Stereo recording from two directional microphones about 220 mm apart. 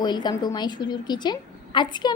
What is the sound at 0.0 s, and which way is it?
A woman's voice, 20° left (ahead or behind).